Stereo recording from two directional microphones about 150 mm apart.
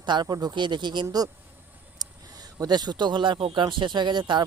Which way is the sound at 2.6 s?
25° right (ahead or behind).